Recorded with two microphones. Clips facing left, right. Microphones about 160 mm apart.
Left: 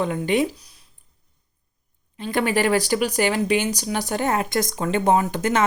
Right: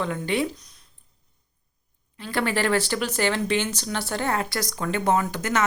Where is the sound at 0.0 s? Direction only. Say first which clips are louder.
Left 4 dB; 15° left (ahead or behind).